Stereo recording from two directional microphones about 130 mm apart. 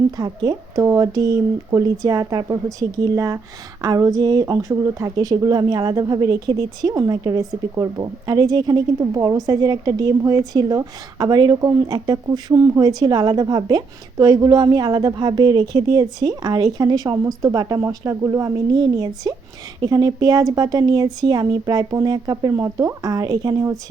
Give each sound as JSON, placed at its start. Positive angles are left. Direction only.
{"t": 0.2, "sound": "a woman's voice", "side_deg": -30}